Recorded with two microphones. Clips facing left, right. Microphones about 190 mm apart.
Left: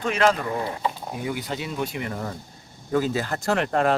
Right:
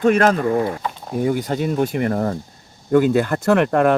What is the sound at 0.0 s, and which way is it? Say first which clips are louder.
Speech: right 7 dB; 50° right (ahead or behind).